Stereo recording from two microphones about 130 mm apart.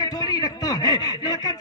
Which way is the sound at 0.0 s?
30° left (ahead or behind).